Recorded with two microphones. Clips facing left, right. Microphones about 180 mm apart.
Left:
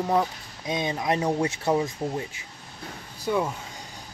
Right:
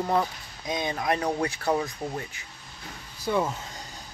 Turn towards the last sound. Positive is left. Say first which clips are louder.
# left 1 dB
turn(degrees=0)  # may be behind; listen again after turning